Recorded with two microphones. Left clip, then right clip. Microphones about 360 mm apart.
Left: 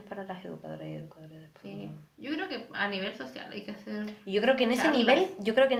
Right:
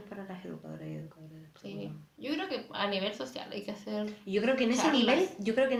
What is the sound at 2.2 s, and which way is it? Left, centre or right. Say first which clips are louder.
A woman's voice: even; centre.